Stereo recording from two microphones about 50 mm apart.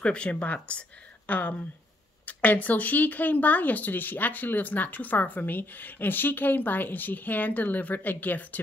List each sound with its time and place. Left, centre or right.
0.0 s speech: left